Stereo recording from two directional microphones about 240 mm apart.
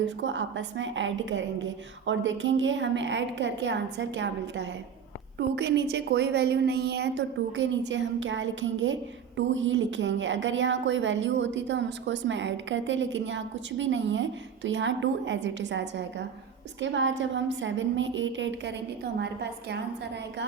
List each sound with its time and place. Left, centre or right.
0.0 s a woman's voice: right